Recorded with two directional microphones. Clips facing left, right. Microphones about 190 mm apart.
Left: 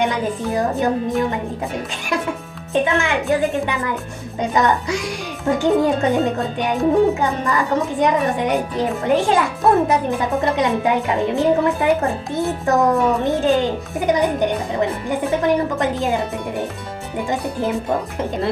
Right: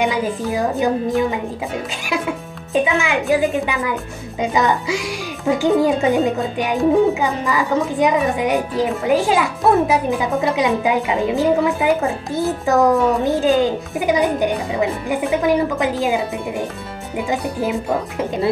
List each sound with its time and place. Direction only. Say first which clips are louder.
0.0 s a woman's voice: right 1 dB; centre (ahead or behind)
2.7 s a woman's voice: right 1 dB; 5° right (ahead or behind)
17.3 s a woman's voice: right 1 dB; 5° right (ahead or behind)